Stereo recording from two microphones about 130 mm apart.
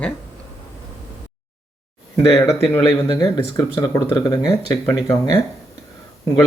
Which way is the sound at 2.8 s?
30° left (ahead or behind).